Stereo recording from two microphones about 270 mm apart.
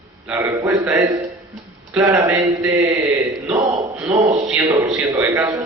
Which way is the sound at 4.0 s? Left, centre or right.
Centre.